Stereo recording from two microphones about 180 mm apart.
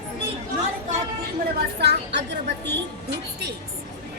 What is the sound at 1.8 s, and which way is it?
Music, 70° right (ahead or behind).